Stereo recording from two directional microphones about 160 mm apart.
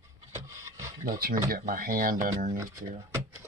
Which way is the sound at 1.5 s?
60° right (ahead or behind).